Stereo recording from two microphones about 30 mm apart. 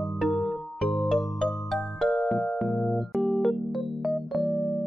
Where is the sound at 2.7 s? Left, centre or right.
Left.